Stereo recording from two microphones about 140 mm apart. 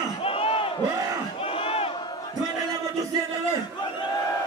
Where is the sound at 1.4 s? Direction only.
40° left (ahead or behind).